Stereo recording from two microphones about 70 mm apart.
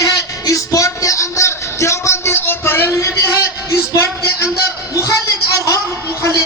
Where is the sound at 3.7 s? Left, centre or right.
Left.